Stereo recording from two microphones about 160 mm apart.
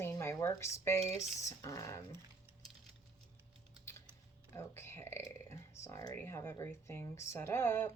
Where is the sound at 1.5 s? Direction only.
20° left (ahead or behind).